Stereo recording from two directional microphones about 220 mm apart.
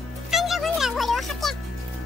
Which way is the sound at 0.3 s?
Centre (ahead or behind).